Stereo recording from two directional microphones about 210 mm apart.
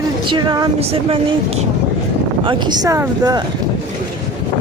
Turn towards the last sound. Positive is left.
turn(degrees=-15)  # may be behind; listen again after turning